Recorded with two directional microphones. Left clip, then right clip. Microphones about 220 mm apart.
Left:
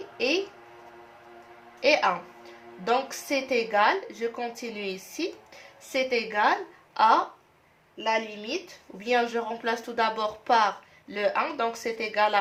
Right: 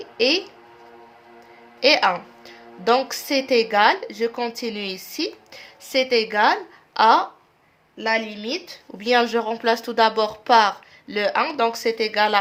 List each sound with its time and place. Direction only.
0.2 s a woman's voice: 50° right (ahead or behind)
1.8 s a woman's voice: 50° right (ahead or behind)